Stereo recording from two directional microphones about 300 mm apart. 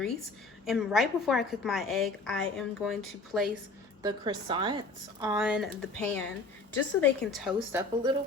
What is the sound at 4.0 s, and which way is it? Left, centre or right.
A woman's voice, centre.